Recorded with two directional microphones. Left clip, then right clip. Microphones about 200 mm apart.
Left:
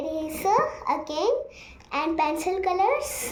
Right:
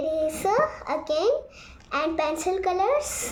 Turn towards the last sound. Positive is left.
turn(degrees=-15)  # may be behind; listen again after turning